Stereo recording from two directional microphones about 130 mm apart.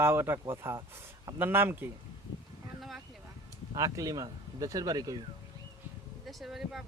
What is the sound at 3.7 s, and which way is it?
Speech, 25° right (ahead or behind).